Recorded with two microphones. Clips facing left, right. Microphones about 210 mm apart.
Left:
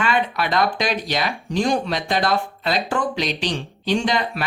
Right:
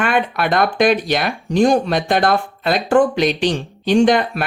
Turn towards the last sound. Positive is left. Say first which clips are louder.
# right 8 dB
turn(degrees=-55)  # may be behind; listen again after turning